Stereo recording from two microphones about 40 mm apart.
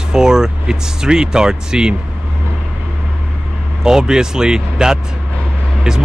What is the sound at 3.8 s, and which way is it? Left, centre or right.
Speech, centre.